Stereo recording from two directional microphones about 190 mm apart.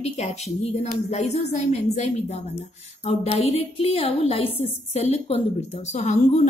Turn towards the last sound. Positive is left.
turn(degrees=35)  # may be behind; listen again after turning